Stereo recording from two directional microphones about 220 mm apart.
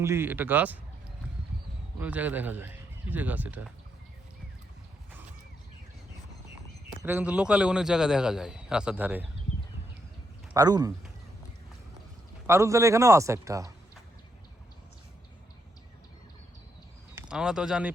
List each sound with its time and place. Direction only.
0.0 s speech: 10° right (ahead or behind)
2.0 s speech: 5° right (ahead or behind)
7.0 s a man's voice: 5° right (ahead or behind)
10.5 s speech: 15° right (ahead or behind)
12.5 s speech: 15° right (ahead or behind)
17.2 s speech: 5° right (ahead or behind)